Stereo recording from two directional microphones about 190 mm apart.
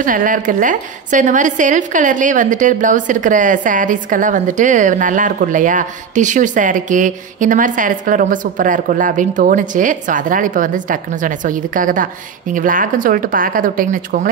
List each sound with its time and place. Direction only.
0.0 s a woman's voice: 45° right (ahead or behind)